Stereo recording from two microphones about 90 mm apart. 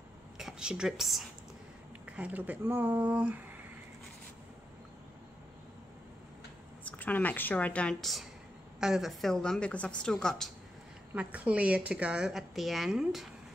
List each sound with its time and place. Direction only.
0.4 s a woman's voice: 5° right (ahead or behind)
2.0 s speech: 15° right (ahead or behind)
6.8 s speech: 15° left (ahead or behind)
8.0 s a woman's voice: centre (ahead or behind)
11.1 s speech: 15° right (ahead or behind)